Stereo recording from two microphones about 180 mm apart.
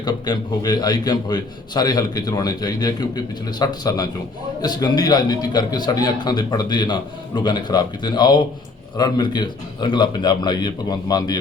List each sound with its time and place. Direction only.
0.0 s a man's voice: 25° left (ahead or behind)